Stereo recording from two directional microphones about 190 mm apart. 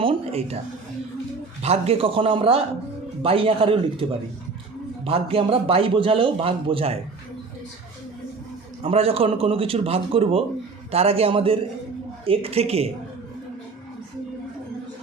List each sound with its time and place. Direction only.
0.0 s a sound: 30° right (ahead or behind)
1.6 s a man's voice: 35° right (ahead or behind)
5.0 s a man's voice: 30° right (ahead or behind)
8.8 s a man's voice: 30° right (ahead or behind)